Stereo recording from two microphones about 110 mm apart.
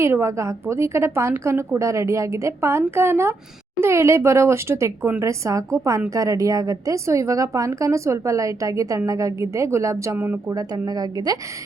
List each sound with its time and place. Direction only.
0.0 s a woman's voice: 25° right (ahead or behind)
10.2 s speech: 15° right (ahead or behind)
10.5 s a woman's voice: 35° right (ahead or behind)